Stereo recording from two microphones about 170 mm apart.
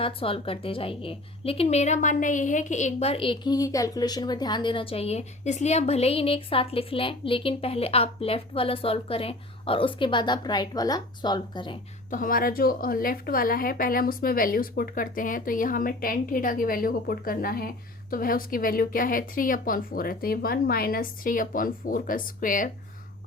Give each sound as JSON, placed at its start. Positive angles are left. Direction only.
{"t": 0.0, "sound": "a woman's voice", "side_deg": 35}
{"t": 12.1, "sound": "a woman's voice", "side_deg": 55}